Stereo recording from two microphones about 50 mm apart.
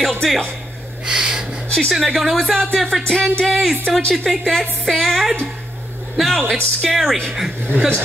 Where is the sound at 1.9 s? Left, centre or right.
Centre.